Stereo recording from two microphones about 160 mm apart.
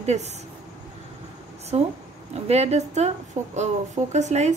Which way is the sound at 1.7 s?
40° right (ahead or behind).